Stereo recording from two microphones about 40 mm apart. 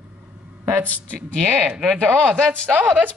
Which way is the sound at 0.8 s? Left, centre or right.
Left.